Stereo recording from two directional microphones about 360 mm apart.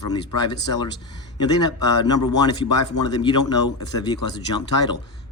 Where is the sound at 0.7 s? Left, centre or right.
Centre.